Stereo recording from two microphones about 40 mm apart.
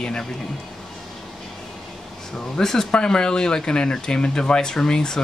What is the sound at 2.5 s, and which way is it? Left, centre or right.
Speech, centre.